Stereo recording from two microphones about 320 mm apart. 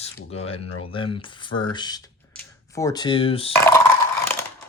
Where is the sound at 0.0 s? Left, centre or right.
Centre.